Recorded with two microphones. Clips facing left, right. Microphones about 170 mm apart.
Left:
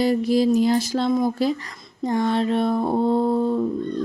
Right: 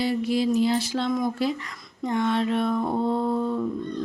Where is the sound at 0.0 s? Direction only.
40° left (ahead or behind).